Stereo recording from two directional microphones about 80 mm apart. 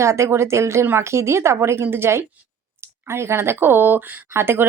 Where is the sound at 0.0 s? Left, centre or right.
Right.